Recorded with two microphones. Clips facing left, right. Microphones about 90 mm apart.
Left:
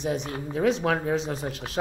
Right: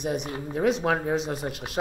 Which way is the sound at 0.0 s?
15° right (ahead or behind).